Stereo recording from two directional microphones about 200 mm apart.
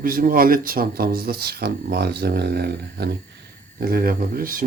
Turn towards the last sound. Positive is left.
turn(degrees=-45)  # may be behind; listen again after turning